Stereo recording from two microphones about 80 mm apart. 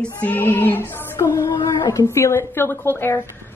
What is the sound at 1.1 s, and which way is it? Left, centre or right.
A woman's voice, left.